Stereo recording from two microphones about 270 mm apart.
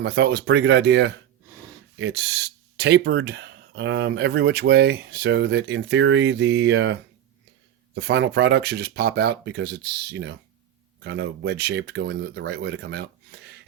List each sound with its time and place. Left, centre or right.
0.0 s speech: right
7.9 s speech: right